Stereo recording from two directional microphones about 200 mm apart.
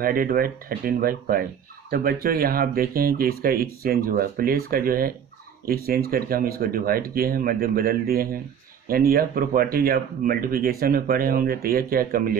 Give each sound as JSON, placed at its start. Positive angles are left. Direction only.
{"t": 0.0, "sound": "speech", "side_deg": -45}